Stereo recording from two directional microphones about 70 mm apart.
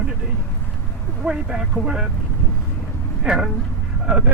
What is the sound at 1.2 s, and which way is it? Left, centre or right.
Speech, centre.